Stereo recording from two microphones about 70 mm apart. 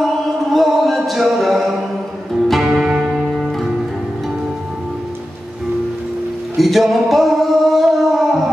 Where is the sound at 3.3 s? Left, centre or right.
Centre.